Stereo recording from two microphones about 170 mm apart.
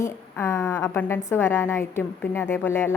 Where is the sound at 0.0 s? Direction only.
15° left (ahead or behind).